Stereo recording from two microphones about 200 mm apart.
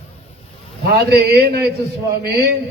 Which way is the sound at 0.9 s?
55° right (ahead or behind).